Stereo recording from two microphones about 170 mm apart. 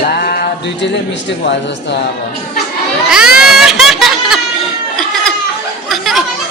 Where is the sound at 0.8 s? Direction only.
90° left.